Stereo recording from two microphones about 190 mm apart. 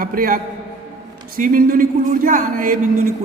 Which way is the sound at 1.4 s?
45° right (ahead or behind).